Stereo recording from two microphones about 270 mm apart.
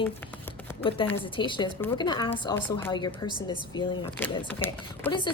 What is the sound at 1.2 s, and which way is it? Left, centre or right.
A woman's voice, centre.